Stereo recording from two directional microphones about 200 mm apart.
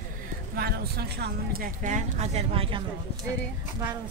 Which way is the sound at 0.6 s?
50° right (ahead or behind).